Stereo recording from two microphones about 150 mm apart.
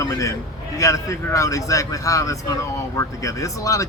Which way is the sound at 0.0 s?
20° left (ahead or behind).